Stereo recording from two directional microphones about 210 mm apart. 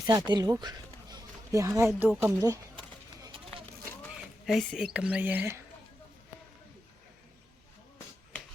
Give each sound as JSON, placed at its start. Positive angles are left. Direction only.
{"t": 0.0, "sound": "speech", "side_deg": -20}
{"t": 3.2, "sound": "a sound", "side_deg": -20}
{"t": 4.4, "sound": "speech", "side_deg": 0}